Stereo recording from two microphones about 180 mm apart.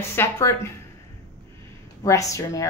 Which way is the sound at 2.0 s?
20° left (ahead or behind).